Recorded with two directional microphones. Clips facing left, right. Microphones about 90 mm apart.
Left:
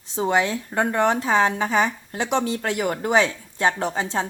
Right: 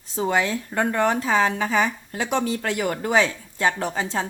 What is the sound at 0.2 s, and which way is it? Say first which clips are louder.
Speech: left 1 dB; 25° left (ahead or behind).